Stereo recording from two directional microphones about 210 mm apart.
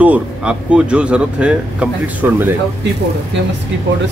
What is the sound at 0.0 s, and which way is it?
Speech, 5° right (ahead or behind).